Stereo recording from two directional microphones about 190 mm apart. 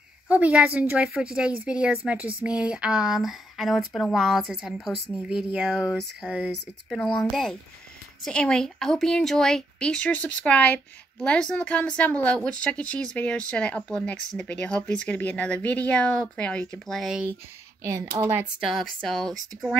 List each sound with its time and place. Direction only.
0.3 s a woman's voice: 5° right (ahead or behind)
17.8 s speech: 15° right (ahead or behind)
18.6 s a woman's voice: centre (ahead or behind)